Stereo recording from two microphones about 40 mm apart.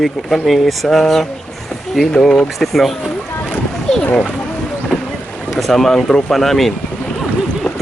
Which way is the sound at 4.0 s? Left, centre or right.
Left.